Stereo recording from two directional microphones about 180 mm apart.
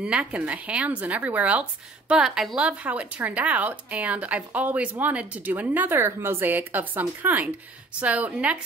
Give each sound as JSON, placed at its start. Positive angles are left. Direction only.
{"t": 0.0, "sound": "speech", "side_deg": -5}